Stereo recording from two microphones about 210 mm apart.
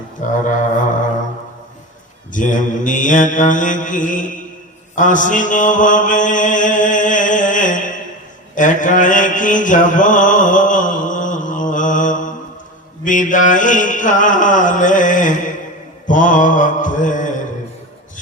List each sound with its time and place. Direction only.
0.2 s mantra: 35° left (ahead or behind)
2.3 s mantra: 40° left (ahead or behind)